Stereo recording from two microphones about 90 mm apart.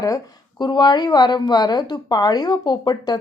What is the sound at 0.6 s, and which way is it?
Speech, 50° left (ahead or behind).